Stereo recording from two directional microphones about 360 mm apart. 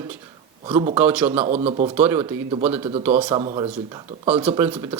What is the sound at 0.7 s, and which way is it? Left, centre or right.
Speech, centre.